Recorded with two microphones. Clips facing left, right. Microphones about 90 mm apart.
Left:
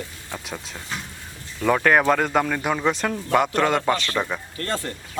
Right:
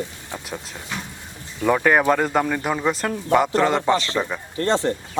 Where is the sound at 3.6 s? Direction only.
15° right (ahead or behind).